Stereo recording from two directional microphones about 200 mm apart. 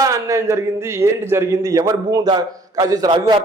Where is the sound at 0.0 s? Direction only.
15° right (ahead or behind).